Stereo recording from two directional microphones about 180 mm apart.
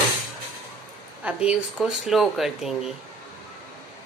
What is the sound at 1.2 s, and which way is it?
Speech, 5° right (ahead or behind).